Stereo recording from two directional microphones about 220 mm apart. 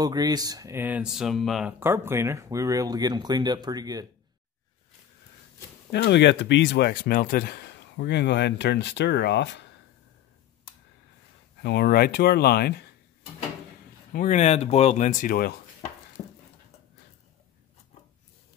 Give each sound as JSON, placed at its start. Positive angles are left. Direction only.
{"t": 0.0, "sound": "speech", "side_deg": -15}
{"t": 5.9, "sound": "speech", "side_deg": 50}
{"t": 11.6, "sound": "speech", "side_deg": 45}
{"t": 14.1, "sound": "speech", "side_deg": 35}